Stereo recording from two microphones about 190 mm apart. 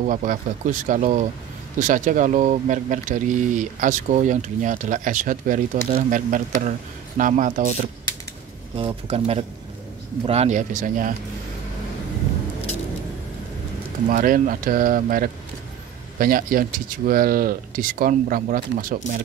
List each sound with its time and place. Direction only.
0.0 s speech: 45° right (ahead or behind)
8.7 s speech: 30° right (ahead or behind)
14.0 s speech: 45° right (ahead or behind)